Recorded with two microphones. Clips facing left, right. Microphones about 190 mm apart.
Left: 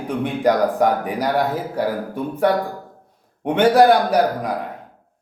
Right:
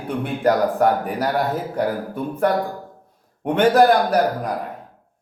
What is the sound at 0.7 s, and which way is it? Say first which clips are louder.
A man's voice: even; 15° left (ahead or behind).